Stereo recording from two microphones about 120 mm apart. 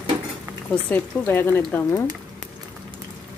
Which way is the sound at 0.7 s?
15° left (ahead or behind).